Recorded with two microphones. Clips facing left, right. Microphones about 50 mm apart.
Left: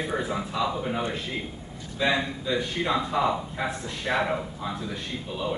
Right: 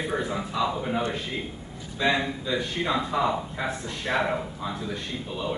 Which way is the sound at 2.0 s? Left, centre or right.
Centre.